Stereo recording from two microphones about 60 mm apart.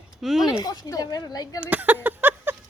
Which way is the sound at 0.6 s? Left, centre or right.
Left.